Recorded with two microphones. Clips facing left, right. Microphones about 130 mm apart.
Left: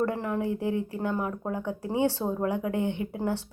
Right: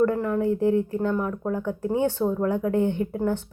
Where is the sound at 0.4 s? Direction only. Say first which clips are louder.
Right 7 dB; 15° left (ahead or behind).